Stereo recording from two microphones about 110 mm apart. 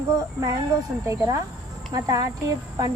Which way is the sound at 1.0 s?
30° right (ahead or behind).